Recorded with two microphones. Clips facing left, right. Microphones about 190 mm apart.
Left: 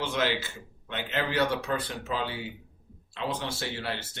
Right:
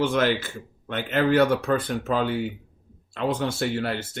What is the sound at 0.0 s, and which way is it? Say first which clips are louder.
Speech: right 7 dB; 50° right (ahead or behind).